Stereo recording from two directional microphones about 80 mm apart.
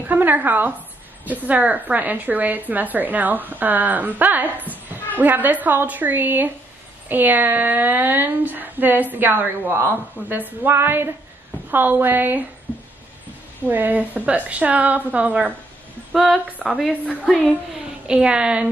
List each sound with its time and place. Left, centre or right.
0.0 s a woman's voice: right
13.6 s a woman's voice: right
16.1 s a woman's voice: centre
18.0 s a woman's voice: centre